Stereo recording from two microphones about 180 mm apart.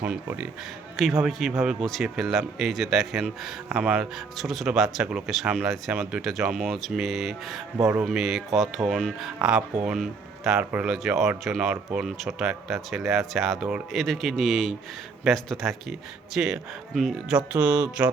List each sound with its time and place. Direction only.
0.0 s speech: 10° right (ahead or behind)
7.8 s speech: 15° right (ahead or behind)
8.0 s speech: centre (ahead or behind)